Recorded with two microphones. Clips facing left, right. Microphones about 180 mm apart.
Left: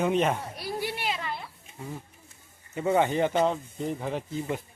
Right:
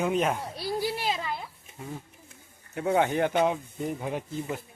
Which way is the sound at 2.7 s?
Centre (ahead or behind).